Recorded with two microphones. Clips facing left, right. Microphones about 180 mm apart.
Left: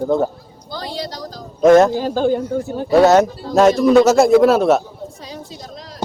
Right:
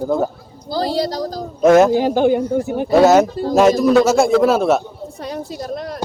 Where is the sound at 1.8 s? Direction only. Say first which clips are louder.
Right 3 dB; 15° right (ahead or behind).